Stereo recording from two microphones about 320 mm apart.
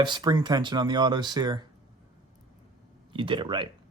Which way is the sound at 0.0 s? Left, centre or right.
Centre.